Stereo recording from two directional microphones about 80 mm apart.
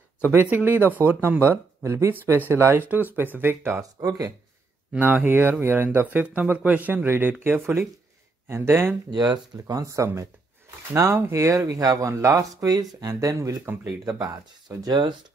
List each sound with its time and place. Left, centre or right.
0.3 s speech: right
4.0 s speech: right
4.9 s speech: right
9.1 s speech: right
10.9 s speech: right
11.3 s speech: right
12.1 s speech: right